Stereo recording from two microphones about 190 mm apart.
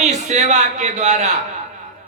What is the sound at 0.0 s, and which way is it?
A man's voice, 35° right (ahead or behind).